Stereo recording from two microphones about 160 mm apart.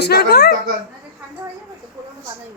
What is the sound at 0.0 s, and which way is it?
Speech, 90° left.